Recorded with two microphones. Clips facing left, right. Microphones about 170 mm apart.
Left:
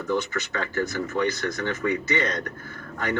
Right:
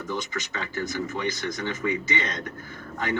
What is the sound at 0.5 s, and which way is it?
Speech, 55° left (ahead or behind).